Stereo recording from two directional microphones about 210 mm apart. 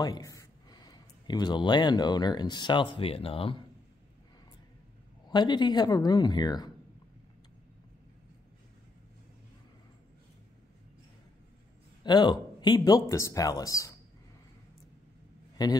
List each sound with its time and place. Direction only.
0.0 s speech: 15° left (ahead or behind)
5.3 s speech: 20° left (ahead or behind)
12.0 s speech: 20° left (ahead or behind)
15.6 s a man's voice: 20° left (ahead or behind)